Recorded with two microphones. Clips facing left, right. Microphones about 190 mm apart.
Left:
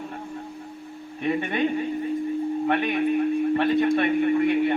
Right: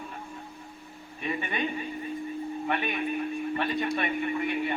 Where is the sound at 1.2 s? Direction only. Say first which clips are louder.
Left 7 dB; 65° left (ahead or behind).